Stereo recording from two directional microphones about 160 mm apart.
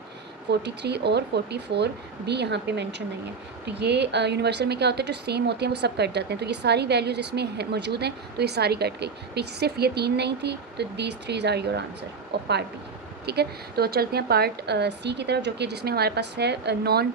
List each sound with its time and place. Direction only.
0.6 s speech: 90° right